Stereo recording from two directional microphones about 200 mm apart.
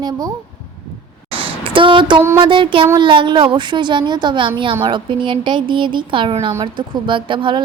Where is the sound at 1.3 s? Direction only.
25° right (ahead or behind).